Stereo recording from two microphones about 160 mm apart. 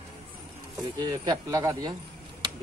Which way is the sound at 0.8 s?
30° right (ahead or behind).